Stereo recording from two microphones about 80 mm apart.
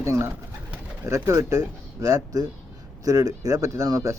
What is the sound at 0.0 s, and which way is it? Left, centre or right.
Speech, right.